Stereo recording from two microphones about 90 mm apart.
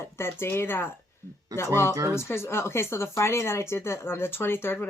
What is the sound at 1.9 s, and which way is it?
Speech, 40° right (ahead or behind).